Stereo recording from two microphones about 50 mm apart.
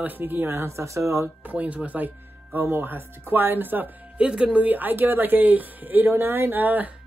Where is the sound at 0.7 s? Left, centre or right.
Right.